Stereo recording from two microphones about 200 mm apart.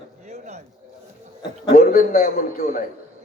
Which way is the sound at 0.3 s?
35° right (ahead or behind).